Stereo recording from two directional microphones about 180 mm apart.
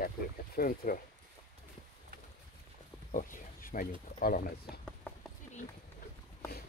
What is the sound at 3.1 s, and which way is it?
Speech, 50° left (ahead or behind).